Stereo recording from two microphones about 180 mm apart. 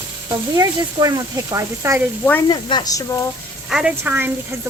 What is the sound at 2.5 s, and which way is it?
Sizzle, 25° left (ahead or behind).